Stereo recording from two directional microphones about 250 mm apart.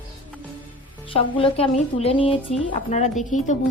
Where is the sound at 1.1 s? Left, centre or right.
Left.